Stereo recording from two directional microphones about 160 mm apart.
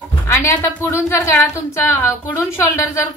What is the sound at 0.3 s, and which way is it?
A woman's voice, 15° left (ahead or behind).